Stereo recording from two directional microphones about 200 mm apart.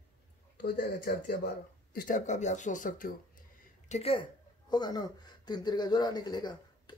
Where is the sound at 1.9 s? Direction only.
40° left (ahead or behind).